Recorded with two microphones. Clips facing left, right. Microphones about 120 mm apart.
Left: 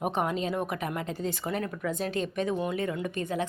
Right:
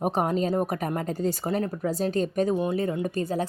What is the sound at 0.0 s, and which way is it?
Speech, 40° right (ahead or behind).